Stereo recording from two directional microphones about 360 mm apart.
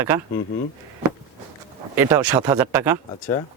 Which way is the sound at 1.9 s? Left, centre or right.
Centre.